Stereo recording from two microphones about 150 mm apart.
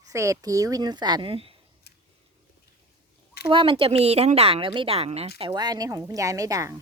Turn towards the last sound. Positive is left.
turn(degrees=-25)  # may be behind; listen again after turning